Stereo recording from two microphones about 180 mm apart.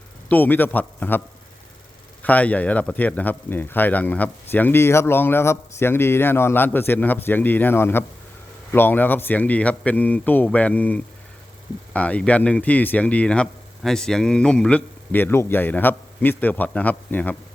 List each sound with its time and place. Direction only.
0.3 s speech: 10° left (ahead or behind)
2.2 s speech: 10° left (ahead or behind)